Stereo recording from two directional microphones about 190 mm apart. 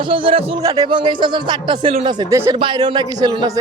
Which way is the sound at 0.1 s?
25° right (ahead or behind).